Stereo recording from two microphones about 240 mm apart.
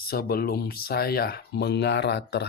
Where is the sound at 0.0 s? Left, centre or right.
Left.